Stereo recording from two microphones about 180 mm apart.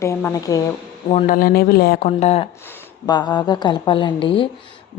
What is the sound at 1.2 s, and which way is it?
Speech, 55° left (ahead or behind).